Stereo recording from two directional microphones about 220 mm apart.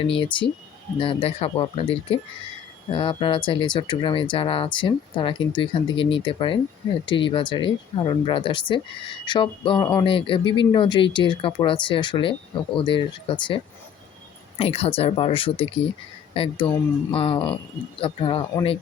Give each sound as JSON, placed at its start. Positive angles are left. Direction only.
{"t": 0.0, "sound": "speech", "side_deg": 25}
{"t": 14.6, "sound": "speech", "side_deg": 25}